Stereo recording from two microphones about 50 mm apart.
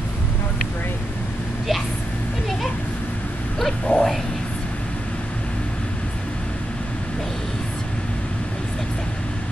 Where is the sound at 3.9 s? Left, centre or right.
Left.